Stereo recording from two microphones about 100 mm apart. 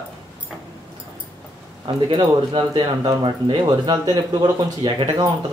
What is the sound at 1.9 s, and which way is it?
A man's voice, 55° right (ahead or behind).